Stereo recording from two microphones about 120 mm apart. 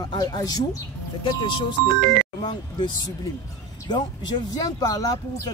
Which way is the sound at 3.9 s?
35° left (ahead or behind).